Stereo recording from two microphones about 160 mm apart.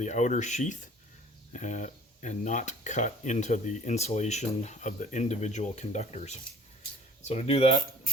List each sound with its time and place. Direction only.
0.0 s speech: 50° left (ahead or behind)